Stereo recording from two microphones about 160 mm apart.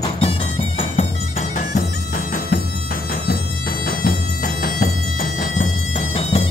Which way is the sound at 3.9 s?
60° left (ahead or behind).